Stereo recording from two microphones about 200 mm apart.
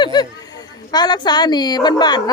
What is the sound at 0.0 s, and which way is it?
A woman's voice, 20° left (ahead or behind).